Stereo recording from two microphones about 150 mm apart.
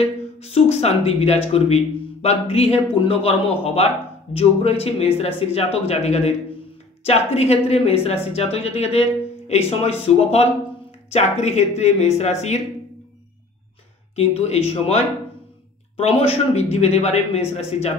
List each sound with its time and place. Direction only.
0.0 s a woman's voice: 45° left (ahead or behind)
14.1 s a woman's voice: 45° left (ahead or behind)
16.0 s a woman's voice: 40° left (ahead or behind)